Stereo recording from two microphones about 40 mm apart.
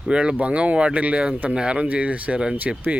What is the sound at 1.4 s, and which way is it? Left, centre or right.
Speech, right.